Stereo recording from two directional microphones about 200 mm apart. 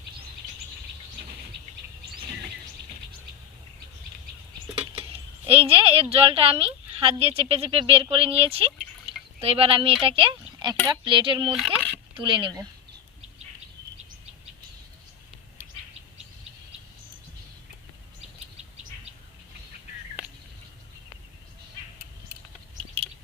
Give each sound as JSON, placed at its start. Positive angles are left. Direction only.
{"t": 5.5, "sound": "a woman's voice", "side_deg": -30}
{"t": 11.5, "sound": "a child's voice", "side_deg": 0}
{"t": 12.1, "sound": "a woman's voice", "side_deg": -25}